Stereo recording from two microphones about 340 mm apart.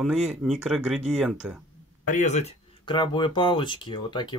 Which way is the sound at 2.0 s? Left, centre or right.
Left.